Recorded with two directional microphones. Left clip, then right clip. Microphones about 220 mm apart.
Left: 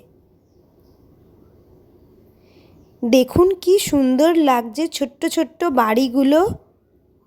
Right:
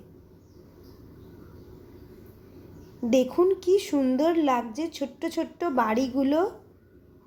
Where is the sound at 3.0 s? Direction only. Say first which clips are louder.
Left 8 dB; 45° left (ahead or behind).